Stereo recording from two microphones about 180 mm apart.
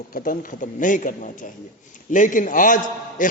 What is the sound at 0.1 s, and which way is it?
A man's voice, 50° left (ahead or behind).